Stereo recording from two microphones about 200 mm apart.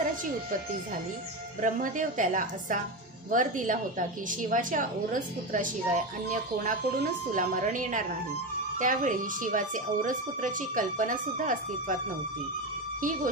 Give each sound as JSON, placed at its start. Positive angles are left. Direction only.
{"t": 1.6, "sound": "speech", "side_deg": -40}
{"t": 7.3, "sound": "speech", "side_deg": -40}